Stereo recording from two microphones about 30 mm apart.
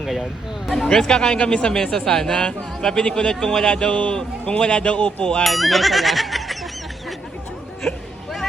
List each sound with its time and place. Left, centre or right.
0.0 s speech: centre
0.9 s speech: left
1.7 s speech: centre; by 3.3 s left
3.4 s speech: centre
3.7 s speech: left
4.1 s speech: left
4.5 s speech: left
5.4 s speech: centre
7.8 s a sound: centre